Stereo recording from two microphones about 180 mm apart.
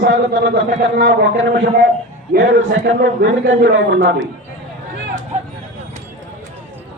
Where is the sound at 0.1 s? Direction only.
75° right (ahead or behind).